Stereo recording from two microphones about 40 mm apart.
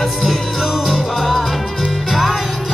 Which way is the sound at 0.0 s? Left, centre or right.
Centre.